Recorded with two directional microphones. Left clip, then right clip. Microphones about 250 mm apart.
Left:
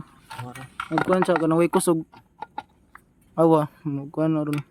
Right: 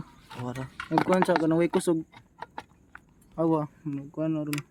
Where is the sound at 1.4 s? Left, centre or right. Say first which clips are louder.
Left 4 dB; left.